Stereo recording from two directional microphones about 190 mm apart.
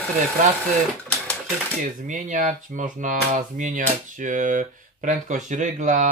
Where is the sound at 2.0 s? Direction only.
40° right (ahead or behind).